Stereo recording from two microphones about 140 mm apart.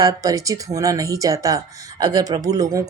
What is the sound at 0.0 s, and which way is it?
Speech, 25° right (ahead or behind).